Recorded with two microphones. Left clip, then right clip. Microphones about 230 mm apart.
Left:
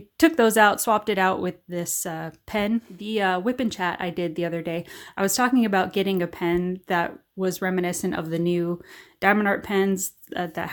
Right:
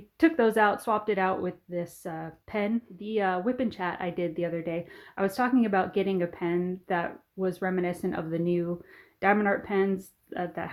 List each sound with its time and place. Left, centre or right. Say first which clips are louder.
0.2 s speech: left 5 dB; left